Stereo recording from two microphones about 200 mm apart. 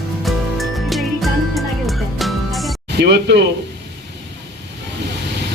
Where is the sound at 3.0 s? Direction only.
55° right (ahead or behind).